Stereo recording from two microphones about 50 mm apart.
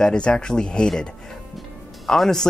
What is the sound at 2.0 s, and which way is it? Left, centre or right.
Speech, centre.